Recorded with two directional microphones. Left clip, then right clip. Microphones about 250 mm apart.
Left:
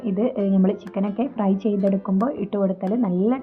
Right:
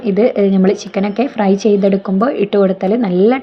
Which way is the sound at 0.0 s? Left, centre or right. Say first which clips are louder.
Right 11 dB; centre.